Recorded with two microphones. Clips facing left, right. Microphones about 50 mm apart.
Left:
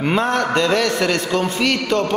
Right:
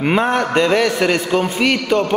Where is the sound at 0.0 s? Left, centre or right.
Centre.